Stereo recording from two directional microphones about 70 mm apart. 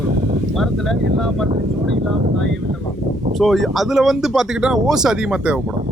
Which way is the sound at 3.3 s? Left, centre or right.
Centre.